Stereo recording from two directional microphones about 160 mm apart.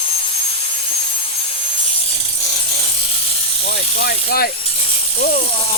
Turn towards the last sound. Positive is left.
turn(degrees=70)  # may be behind; listen again after turning